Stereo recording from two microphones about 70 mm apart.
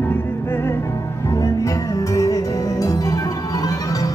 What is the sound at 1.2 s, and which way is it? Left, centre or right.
Music, left.